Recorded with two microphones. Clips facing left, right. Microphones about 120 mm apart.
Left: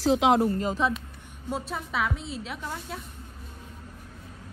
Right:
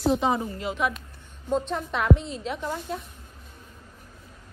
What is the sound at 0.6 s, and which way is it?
Speech, 35° left (ahead or behind).